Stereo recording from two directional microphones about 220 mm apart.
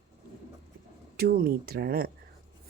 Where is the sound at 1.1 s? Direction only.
45° right (ahead or behind).